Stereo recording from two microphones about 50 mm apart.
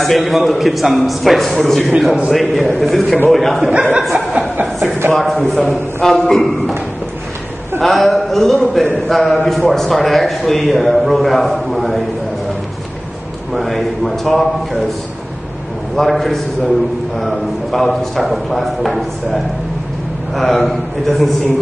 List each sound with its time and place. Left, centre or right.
0.0 s a man's voice: centre
4.0 s a sound: centre
5.1 s a man's voice: centre
7.8 s a man's voice: centre
13.5 s a man's voice: centre
16.0 s a man's voice: centre